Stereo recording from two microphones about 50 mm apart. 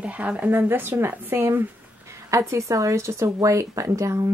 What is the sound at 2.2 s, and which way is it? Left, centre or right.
Speech, right.